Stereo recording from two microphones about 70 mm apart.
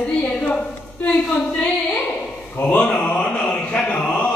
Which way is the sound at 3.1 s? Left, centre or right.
Centre.